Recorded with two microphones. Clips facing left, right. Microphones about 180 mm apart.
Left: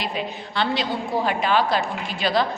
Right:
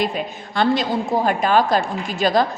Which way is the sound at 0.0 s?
45° right (ahead or behind).